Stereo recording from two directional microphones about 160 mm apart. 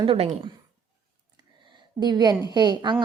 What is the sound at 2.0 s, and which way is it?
Speech, 25° right (ahead or behind).